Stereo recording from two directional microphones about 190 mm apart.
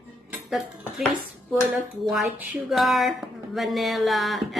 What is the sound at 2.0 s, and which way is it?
A woman's voice, centre (ahead or behind).